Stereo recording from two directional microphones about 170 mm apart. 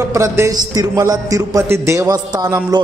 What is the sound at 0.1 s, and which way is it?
A man's voice, 15° right (ahead or behind).